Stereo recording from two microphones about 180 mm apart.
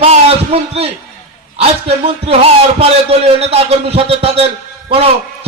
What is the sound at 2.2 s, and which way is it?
A man's voice, 35° right (ahead or behind).